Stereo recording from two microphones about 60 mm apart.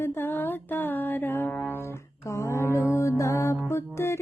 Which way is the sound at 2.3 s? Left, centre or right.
Left.